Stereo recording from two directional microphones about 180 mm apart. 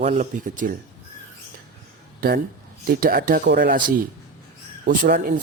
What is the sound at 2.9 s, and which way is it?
Speech, 55° right (ahead or behind).